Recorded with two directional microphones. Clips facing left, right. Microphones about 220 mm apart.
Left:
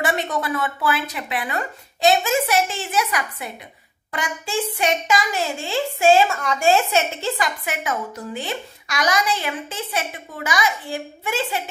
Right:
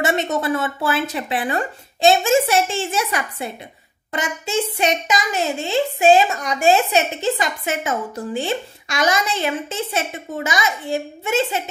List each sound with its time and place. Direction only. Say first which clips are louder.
0.0 s a child's voice: right 3 dB; 25° right (ahead or behind)